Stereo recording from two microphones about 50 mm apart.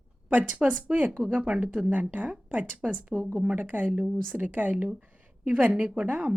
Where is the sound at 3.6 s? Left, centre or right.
Right.